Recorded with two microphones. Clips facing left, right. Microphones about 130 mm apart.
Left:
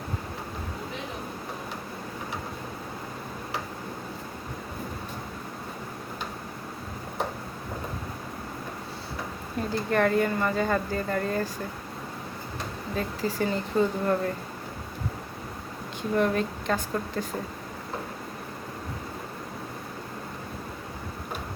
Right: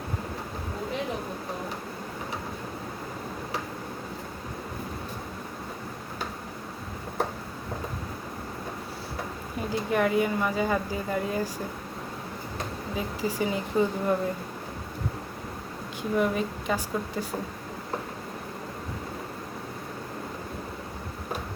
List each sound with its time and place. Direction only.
9.6 s speech: 10° right (ahead or behind)
13.0 s speech: 10° right (ahead or behind)
16.1 s a woman's voice: 5° right (ahead or behind)